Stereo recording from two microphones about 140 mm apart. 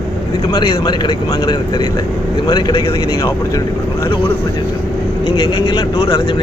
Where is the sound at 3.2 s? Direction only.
25° left (ahead or behind).